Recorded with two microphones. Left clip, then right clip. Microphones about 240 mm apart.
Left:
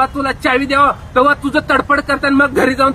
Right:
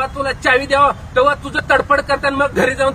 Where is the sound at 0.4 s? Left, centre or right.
Centre.